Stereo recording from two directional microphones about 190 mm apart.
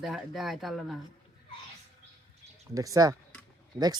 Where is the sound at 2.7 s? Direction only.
20° right (ahead or behind).